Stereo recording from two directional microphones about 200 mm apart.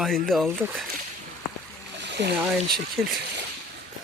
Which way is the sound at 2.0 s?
55° right (ahead or behind).